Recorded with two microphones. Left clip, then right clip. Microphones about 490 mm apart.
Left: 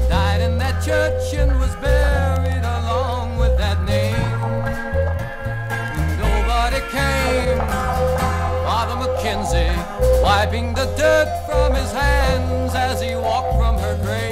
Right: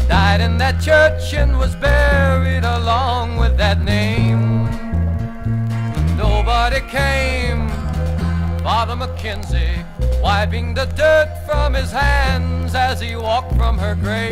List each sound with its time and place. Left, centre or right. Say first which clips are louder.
0.1 s music: right 6 dB; right
6.3 s music: right 3 dB; right
10.2 s music: left 2 dB; right